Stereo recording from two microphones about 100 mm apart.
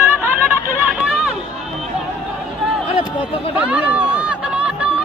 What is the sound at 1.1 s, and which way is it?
Run, 10° right (ahead or behind).